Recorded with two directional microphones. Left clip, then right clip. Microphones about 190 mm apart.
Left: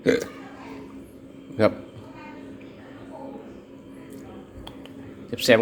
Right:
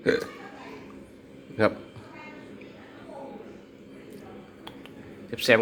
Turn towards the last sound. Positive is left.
turn(degrees=5)  # may be behind; listen again after turning